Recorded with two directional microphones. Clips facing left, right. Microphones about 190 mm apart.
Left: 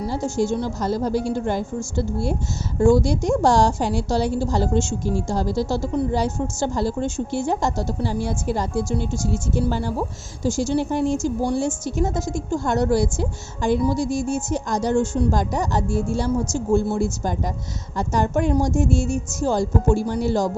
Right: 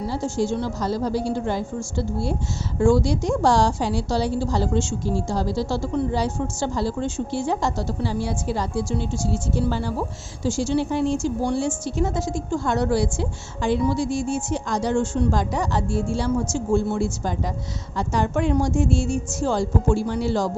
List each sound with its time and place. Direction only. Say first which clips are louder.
0.0 s a sound: left 1 dB; 45° left (ahead or behind)
0.8 s a woman's voice: left 2 dB; 50° left (ahead or behind)
10.4 s a woman's voice: left 1 dB; 45° left (ahead or behind)